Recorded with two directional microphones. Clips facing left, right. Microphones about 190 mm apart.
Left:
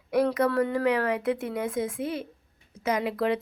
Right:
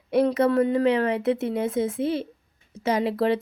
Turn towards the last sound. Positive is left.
turn(degrees=-30)  # may be behind; listen again after turning